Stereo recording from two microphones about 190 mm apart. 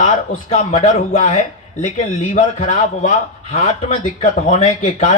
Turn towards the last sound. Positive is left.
turn(degrees=35)  # may be behind; listen again after turning